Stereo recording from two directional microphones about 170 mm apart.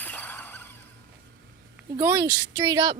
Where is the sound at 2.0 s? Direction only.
15° right (ahead or behind).